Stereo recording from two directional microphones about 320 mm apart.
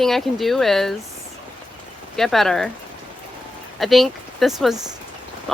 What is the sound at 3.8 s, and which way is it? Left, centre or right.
Speech, centre.